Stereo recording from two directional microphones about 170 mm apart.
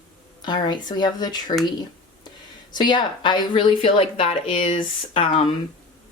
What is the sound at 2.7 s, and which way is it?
Speech, 25° left (ahead or behind).